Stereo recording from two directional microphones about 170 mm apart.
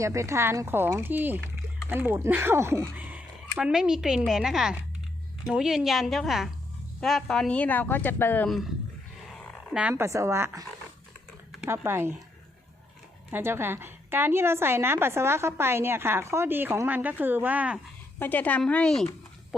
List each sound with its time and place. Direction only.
0.0 s a woman's voice: 15° right (ahead or behind); by 8.4 s 10° left (ahead or behind)
9.6 s speech: 5° right (ahead or behind)
9.9 s a woman's voice: 15° right (ahead or behind)
13.3 s a woman's voice: 15° right (ahead or behind)
18.2 s a woman's voice: 10° left (ahead or behind)